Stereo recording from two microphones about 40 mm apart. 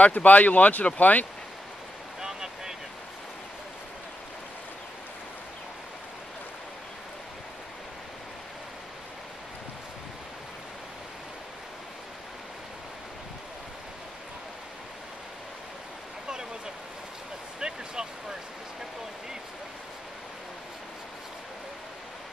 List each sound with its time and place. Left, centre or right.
0.0 s speech: left
2.2 s vehicle: centre
17.6 s a sound: centre